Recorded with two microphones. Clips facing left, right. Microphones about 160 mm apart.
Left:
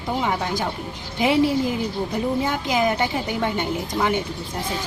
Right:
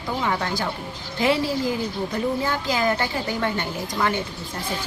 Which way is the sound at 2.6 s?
15° left (ahead or behind).